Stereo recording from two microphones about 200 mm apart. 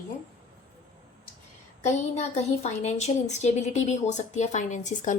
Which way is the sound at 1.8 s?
35° left (ahead or behind).